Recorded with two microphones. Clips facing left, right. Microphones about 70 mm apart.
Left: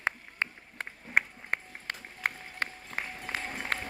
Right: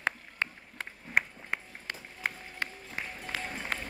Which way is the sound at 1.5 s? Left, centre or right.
Left.